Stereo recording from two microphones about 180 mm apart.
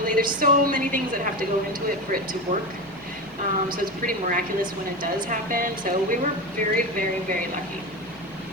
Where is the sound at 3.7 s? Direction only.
50° right (ahead or behind).